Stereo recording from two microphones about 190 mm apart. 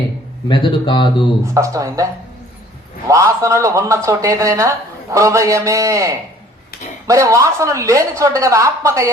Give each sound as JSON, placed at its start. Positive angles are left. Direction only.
{"t": 0.4, "sound": "speech", "side_deg": 25}
{"t": 1.5, "sound": "speech", "side_deg": -15}
{"t": 3.1, "sound": "speech", "side_deg": -15}